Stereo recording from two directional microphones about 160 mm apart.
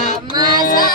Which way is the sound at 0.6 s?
60° left (ahead or behind).